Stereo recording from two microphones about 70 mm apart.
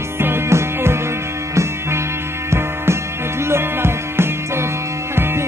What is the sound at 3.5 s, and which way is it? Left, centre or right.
Music, right.